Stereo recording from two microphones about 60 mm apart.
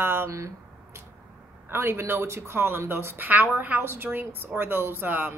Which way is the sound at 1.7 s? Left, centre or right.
Right.